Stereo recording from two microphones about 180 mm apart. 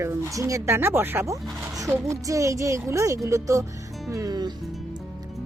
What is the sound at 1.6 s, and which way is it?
Music, 20° right (ahead or behind).